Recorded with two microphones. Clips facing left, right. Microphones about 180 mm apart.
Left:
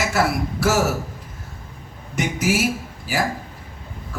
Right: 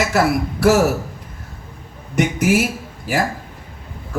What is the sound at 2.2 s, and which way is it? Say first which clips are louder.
Speech: right 5 dB; 60° right (ahead or behind).